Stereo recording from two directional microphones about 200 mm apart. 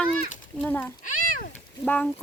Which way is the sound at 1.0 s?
45° left (ahead or behind).